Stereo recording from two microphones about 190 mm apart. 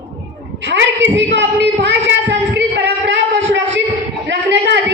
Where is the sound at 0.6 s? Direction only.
70° right (ahead or behind).